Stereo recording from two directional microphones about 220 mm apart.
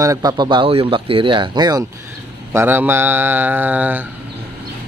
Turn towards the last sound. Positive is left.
turn(degrees=-10)  # may be behind; listen again after turning